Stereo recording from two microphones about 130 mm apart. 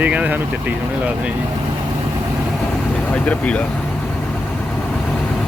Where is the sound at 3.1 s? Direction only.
10° left (ahead or behind).